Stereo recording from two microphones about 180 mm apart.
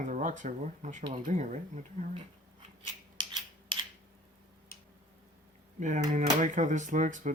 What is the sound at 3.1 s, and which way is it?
Scissors, 25° right (ahead or behind).